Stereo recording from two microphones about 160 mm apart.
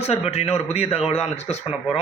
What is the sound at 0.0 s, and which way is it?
A man's voice, 40° left (ahead or behind).